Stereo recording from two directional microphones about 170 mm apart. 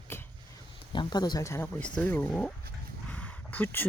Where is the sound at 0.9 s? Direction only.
25° left (ahead or behind).